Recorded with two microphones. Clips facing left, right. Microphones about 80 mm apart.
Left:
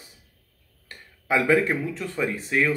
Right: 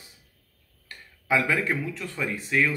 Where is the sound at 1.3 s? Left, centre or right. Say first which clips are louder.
Left 4 dB; left.